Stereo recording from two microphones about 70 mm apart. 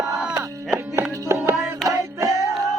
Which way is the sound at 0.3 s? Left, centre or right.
Right.